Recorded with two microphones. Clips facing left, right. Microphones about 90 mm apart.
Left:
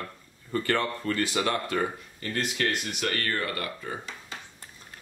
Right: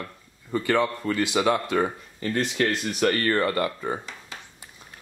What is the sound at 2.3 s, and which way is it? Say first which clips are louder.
Speech: right 4 dB; 30° right (ahead or behind).